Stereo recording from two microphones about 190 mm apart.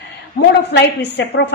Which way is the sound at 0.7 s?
60° left (ahead or behind).